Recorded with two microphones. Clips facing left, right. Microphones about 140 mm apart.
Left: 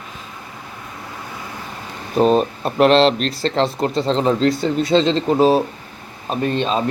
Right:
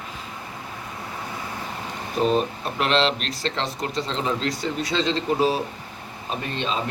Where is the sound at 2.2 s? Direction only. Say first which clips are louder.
Left 5 dB; 40° left (ahead or behind).